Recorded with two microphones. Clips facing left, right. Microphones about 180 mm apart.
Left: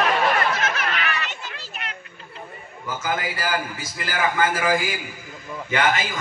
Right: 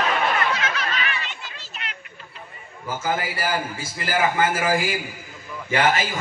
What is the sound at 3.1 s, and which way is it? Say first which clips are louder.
A man's voice: right 1 dB; 30° right (ahead or behind).